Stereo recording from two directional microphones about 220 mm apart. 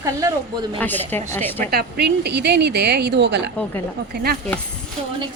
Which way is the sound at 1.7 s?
50° right (ahead or behind).